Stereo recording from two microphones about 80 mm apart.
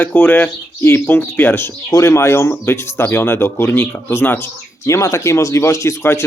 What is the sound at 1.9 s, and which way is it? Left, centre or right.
Speech, left.